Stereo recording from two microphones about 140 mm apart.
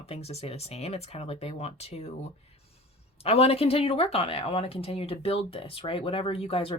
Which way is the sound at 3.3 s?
45° left (ahead or behind).